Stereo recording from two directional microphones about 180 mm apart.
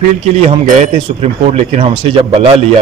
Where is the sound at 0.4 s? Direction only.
40° right (ahead or behind).